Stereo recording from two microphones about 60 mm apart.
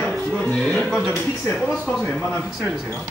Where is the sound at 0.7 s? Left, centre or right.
Centre.